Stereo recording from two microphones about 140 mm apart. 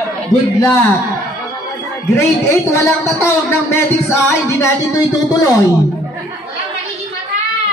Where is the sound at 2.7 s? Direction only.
20° left (ahead or behind).